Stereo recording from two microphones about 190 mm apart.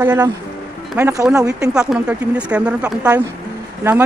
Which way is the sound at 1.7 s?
5° right (ahead or behind).